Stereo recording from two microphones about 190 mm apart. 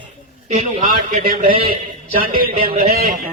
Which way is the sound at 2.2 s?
50° right (ahead or behind).